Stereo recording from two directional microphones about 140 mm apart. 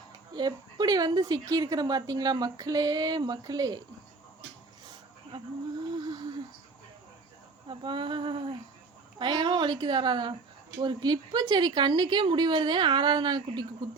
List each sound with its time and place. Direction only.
0.3 s speech: 30° right (ahead or behind)
6.0 s a sound: 30° right (ahead or behind)
7.7 s speech: 35° right (ahead or behind)